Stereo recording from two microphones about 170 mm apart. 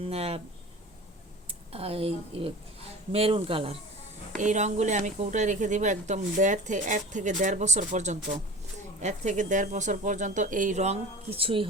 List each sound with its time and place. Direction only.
0.0 s speech: 35° right (ahead or behind)
1.5 s speech: 35° right (ahead or behind)
4.4 s speech: 45° right (ahead or behind)